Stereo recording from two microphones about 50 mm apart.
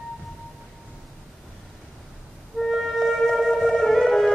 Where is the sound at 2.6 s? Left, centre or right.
Centre.